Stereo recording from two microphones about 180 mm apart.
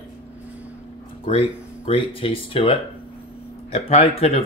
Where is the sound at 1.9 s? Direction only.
30° left (ahead or behind).